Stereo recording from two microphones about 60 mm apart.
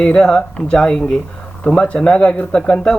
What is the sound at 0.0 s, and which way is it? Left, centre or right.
Speech, centre.